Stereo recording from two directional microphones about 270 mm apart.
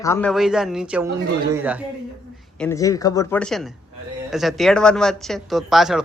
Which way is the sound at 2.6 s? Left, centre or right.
Centre.